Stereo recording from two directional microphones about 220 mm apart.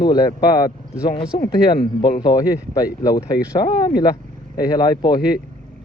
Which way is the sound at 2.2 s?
15° left (ahead or behind).